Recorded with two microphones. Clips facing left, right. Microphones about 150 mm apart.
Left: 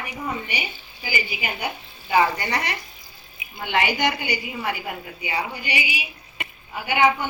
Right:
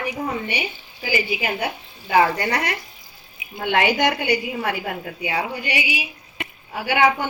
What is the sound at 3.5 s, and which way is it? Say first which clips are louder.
A woman's voice: right 4 dB; 60° right (ahead or behind).